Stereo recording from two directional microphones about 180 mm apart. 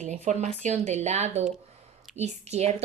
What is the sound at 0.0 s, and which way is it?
A woman's voice, 40° right (ahead or behind).